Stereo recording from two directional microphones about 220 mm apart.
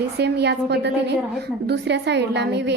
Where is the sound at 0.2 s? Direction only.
50° right (ahead or behind).